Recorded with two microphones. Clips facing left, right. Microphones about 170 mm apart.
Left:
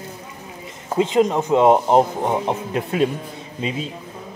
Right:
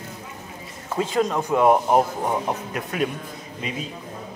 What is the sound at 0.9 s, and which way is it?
Speech, 20° left (ahead or behind).